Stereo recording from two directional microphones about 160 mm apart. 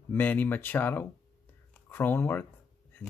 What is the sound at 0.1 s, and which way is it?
Speech, 10° left (ahead or behind).